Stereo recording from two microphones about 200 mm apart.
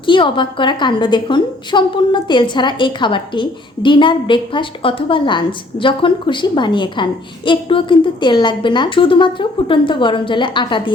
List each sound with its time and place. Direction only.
0.0 s a woman's voice: 25° left (ahead or behind)